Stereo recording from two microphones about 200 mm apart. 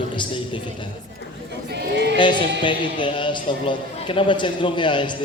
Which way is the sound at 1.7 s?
60° right (ahead or behind).